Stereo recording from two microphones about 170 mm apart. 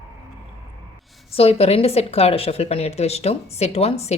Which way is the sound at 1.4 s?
35° left (ahead or behind).